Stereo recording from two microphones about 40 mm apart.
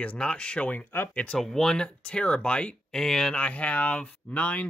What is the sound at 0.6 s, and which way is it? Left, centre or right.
Speech, left.